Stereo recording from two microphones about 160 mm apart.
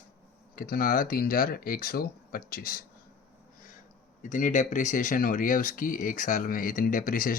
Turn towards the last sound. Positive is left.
turn(degrees=60)  # may be behind; listen again after turning